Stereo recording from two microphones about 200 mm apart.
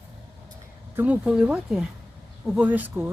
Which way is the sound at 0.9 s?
10° right (ahead or behind).